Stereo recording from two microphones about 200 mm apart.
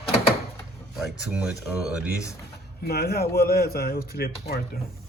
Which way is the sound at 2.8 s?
50° left (ahead or behind).